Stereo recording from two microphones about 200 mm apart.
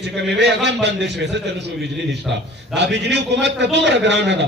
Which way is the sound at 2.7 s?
60° right (ahead or behind).